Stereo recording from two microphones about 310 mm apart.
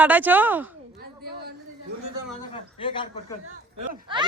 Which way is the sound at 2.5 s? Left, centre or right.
Centre.